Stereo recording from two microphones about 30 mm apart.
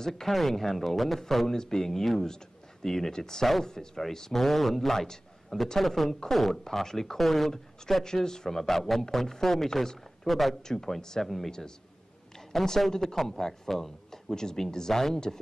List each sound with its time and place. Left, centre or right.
0.0 s a man's voice: centre
4.9 s speech: centre
5.8 s a man's voice: centre
8.0 s a man's voice: left
12.5 s a man's voice: centre
14.3 s speech: left